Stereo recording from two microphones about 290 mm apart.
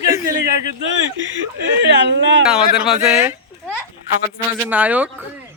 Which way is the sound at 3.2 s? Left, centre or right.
Centre.